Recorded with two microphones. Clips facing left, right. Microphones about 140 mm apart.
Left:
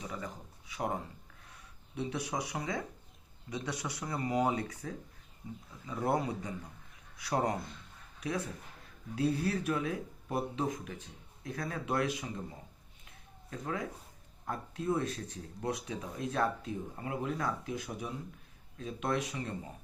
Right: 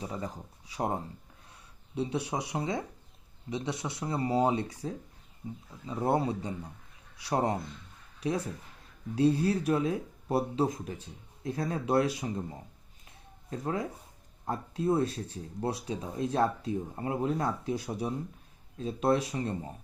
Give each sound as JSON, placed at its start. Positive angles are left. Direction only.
{"t": 0.0, "sound": "speech", "side_deg": -35}
{"t": 2.0, "sound": "speech", "side_deg": -30}
{"t": 9.1, "sound": "speech", "side_deg": -30}
{"t": 13.5, "sound": "speech", "side_deg": -30}